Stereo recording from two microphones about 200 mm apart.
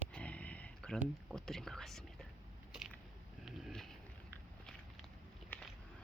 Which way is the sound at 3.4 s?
Centre (ahead or behind).